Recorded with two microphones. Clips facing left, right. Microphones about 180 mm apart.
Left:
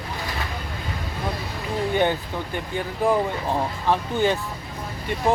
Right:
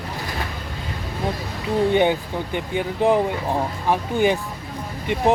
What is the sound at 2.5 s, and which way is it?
Speech, 20° right (ahead or behind).